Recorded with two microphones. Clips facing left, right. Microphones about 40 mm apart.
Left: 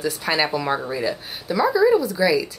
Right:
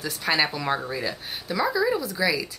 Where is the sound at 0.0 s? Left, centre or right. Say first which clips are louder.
Left 2 dB; centre.